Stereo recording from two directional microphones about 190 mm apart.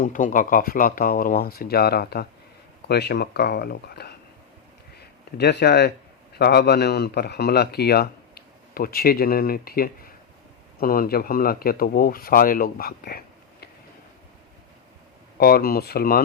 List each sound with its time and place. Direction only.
0.0 s a man's voice: 45° left (ahead or behind)
15.4 s speech: 55° left (ahead or behind)